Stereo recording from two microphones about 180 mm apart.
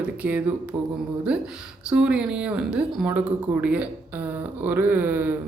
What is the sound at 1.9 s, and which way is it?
Speech, 5° right (ahead or behind).